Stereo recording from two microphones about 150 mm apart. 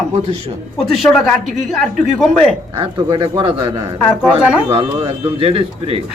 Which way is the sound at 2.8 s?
30° right (ahead or behind).